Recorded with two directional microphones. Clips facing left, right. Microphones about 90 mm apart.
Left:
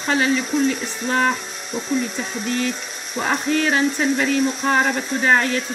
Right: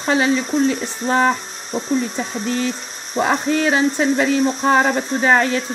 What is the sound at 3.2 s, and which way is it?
Speech, 20° right (ahead or behind).